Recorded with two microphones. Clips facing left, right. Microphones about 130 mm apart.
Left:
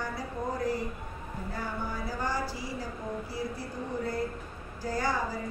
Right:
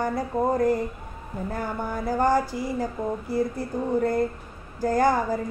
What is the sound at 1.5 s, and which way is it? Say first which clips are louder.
Speech: right 6 dB; 50° right (ahead or behind).